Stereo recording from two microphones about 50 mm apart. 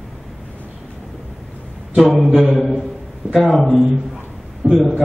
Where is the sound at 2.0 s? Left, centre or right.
Centre.